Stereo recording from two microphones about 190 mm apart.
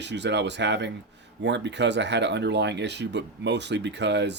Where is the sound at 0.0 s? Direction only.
65° right (ahead or behind).